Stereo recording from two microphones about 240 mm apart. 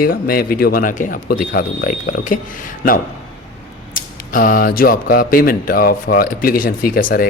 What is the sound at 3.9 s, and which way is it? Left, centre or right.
Speech, left.